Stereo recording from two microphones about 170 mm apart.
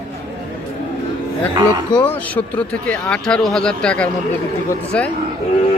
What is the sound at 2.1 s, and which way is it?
Speech, 10° left (ahead or behind).